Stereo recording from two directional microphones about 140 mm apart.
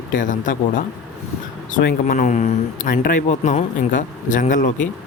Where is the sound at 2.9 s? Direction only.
75° left (ahead or behind).